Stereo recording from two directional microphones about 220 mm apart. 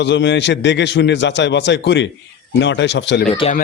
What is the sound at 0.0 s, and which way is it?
Speech, 55° left (ahead or behind).